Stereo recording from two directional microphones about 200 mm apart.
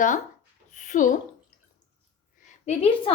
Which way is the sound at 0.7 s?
40° left (ahead or behind).